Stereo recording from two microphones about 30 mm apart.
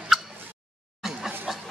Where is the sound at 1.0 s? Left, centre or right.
Centre.